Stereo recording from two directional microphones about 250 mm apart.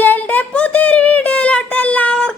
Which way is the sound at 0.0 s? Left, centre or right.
Centre.